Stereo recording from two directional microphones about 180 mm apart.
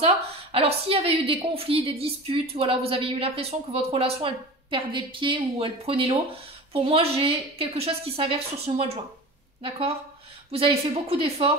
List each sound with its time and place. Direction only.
0.0 s a woman's voice: 30° right (ahead or behind)